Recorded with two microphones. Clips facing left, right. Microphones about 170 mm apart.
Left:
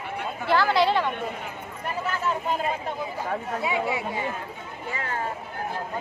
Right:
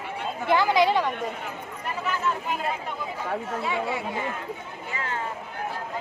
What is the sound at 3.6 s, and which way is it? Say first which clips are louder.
Speech: left 3 dB; centre (ahead or behind).